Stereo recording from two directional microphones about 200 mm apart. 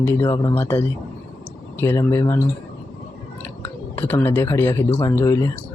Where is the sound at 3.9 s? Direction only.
10° left (ahead or behind).